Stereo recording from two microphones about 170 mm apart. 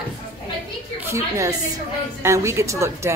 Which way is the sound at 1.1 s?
20° right (ahead or behind).